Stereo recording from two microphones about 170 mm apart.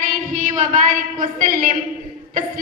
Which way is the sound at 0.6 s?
55° right (ahead or behind).